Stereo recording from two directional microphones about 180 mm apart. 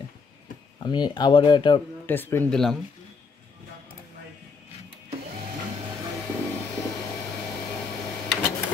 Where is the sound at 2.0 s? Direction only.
10° left (ahead or behind).